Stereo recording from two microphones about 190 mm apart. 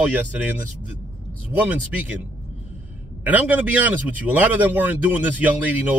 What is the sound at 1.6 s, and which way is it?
A man's voice, 10° right (ahead or behind).